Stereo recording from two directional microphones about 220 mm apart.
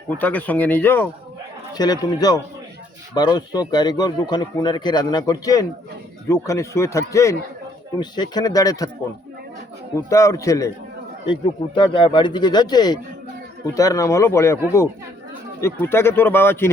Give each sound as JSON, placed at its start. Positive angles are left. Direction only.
{"t": 0.2, "sound": "a man's voice", "side_deg": 5}
{"t": 10.1, "sound": "a man's voice", "side_deg": 15}
{"t": 15.6, "sound": "a man's voice", "side_deg": 10}